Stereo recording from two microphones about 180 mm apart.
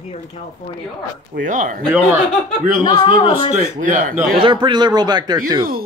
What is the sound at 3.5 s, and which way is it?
Speech, 45° right (ahead or behind).